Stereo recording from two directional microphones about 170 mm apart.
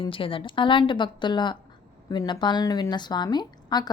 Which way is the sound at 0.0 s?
30° left (ahead or behind).